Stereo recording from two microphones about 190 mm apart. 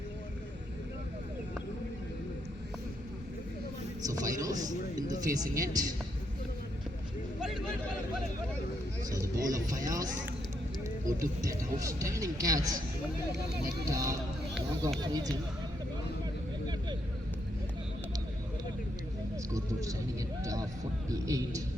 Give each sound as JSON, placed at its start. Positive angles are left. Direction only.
{"t": 4.0, "sound": "a man's voice", "side_deg": -20}
{"t": 9.0, "sound": "speech", "side_deg": -15}
{"t": 11.2, "sound": "a man's voice", "side_deg": -15}
{"t": 13.9, "sound": "a man's voice", "side_deg": -15}
{"t": 19.5, "sound": "vehicle", "side_deg": -15}
{"t": 20.4, "sound": "a sound", "side_deg": -15}
{"t": 21.1, "sound": "a man's voice", "side_deg": -15}